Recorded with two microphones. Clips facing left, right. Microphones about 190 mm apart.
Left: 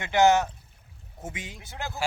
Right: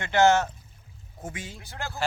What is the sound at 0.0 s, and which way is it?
A man's voice, 15° left (ahead or behind).